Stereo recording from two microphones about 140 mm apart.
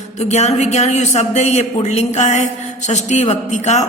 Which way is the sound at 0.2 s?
50° left (ahead or behind).